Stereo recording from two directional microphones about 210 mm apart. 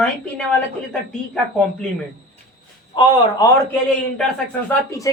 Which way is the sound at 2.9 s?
20° left (ahead or behind).